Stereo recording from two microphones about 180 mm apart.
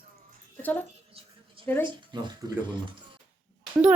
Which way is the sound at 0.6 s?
10° left (ahead or behind).